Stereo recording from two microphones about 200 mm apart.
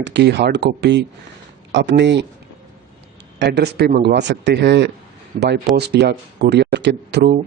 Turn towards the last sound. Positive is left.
turn(degrees=-60)  # may be behind; listen again after turning